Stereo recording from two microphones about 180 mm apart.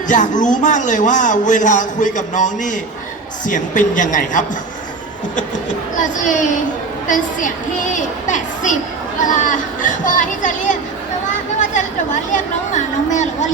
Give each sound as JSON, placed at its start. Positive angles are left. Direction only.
{"t": 0.1, "sound": "a man's voice", "side_deg": 45}
{"t": 6.0, "sound": "a man's voice", "side_deg": 45}
{"t": 11.6, "sound": "chatter", "side_deg": 45}
{"t": 12.3, "sound": "a man's voice", "side_deg": 40}